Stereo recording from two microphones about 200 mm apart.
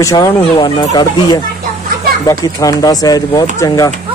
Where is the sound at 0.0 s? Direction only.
20° left (ahead or behind).